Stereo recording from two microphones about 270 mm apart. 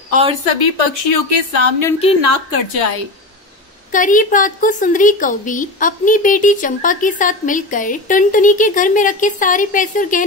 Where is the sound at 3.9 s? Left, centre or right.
Left.